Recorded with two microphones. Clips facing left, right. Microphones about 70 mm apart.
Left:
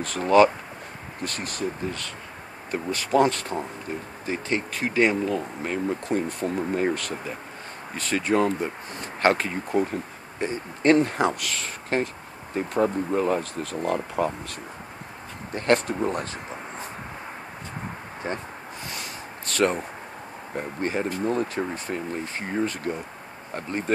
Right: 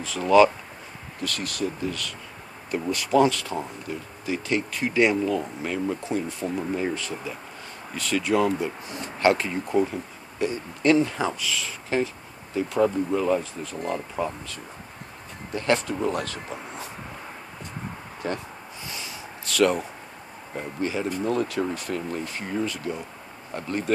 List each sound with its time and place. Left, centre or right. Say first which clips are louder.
0.2 s speech: even; left
6.0 s speech: left 2 dB; left
7.9 s speech: even; left
11.0 s speech: left 2 dB; left
11.5 s speech: even; left
13.4 s speech: left 3 dB; left
13.9 s speech: left 3 dB; left
18.2 s speech: right 1 dB; left
18.9 s a sound: right 1 dB; left
20.5 s speech: left 1 dB; left
21.2 s speech: right 3 dB; left
23.5 s speech: right 1 dB; left